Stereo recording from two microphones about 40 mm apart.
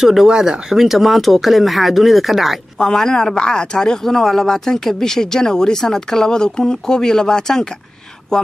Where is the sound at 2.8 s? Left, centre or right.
Centre.